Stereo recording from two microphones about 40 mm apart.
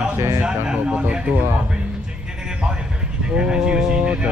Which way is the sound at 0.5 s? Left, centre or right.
Right.